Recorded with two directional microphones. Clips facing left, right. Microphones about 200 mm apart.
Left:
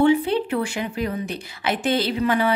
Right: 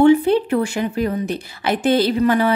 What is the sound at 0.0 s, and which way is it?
A woman's voice, 45° right (ahead or behind).